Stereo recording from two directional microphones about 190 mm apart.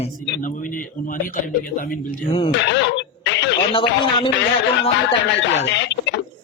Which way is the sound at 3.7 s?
25° left (ahead or behind).